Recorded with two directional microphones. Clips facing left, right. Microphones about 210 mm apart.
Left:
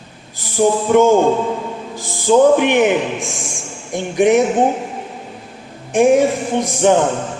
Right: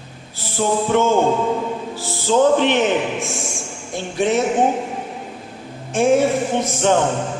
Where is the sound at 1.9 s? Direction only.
15° left (ahead or behind).